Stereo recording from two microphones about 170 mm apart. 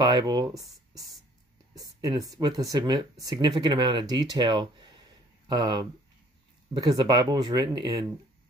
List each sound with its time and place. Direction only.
0.0 s speech: 25° right (ahead or behind)